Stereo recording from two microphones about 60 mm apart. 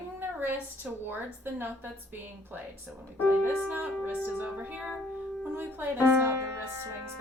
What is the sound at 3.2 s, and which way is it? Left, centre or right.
Music, right.